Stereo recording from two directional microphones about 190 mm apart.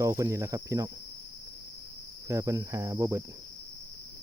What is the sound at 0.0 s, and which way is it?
Cricket, 15° right (ahead or behind).